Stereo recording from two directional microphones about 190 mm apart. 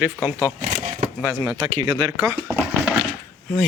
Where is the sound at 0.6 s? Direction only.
40° right (ahead or behind).